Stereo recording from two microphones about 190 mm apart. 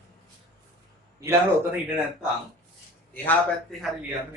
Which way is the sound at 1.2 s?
15° right (ahead or behind).